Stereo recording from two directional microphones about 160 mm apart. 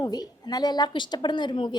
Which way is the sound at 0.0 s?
25° left (ahead or behind).